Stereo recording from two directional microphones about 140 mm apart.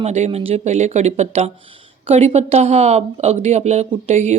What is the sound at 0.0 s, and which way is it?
A woman's voice, 55° right (ahead or behind).